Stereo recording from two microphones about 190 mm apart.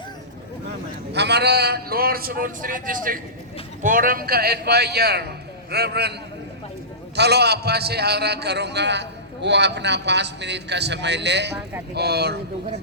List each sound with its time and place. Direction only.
1.1 s a man's voice: 60° right (ahead or behind)
7.2 s a man's voice: 60° right (ahead or behind)